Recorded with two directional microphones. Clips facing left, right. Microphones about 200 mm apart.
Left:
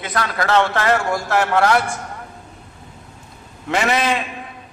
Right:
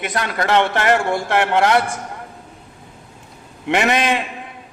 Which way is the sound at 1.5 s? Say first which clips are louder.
Right 1 dB; 20° right (ahead or behind).